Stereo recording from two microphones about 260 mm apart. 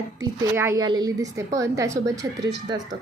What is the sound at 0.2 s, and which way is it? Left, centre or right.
Speech, centre.